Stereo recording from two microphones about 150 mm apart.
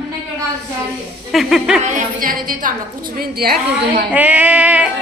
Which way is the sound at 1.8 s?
60° right (ahead or behind).